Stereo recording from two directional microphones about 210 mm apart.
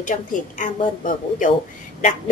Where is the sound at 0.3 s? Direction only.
40° left (ahead or behind).